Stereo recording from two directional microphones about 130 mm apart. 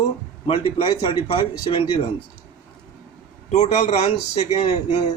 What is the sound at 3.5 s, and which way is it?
Speech, 60° left (ahead or behind).